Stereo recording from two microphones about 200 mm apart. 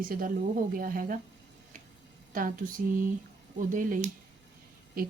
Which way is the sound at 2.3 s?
45° right (ahead or behind).